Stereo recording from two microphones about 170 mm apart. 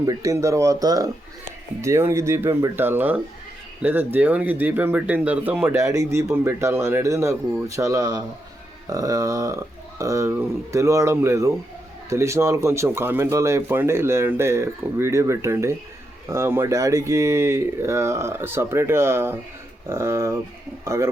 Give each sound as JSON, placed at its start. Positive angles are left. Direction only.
{"t": 0.0, "sound": "speech", "side_deg": -20}
{"t": 5.7, "sound": "speech", "side_deg": -20}